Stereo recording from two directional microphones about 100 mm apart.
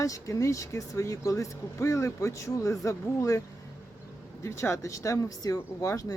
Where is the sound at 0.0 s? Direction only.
35° left (ahead or behind).